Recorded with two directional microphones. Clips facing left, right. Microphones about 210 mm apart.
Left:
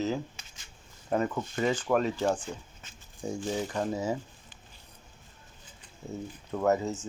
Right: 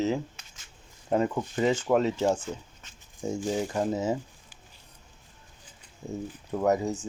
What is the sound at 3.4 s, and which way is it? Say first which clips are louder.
Speech: right 3 dB; 10° right (ahead or behind).